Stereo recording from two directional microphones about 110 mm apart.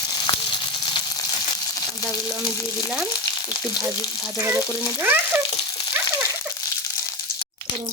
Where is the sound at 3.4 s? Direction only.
35° left (ahead or behind).